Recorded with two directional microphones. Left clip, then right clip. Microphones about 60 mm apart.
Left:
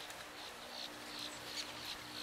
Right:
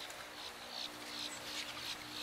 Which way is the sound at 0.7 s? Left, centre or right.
Right.